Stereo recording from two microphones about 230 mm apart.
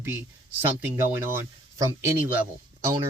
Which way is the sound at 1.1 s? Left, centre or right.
Centre.